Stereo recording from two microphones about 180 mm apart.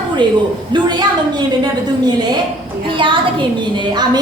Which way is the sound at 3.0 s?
25° right (ahead or behind).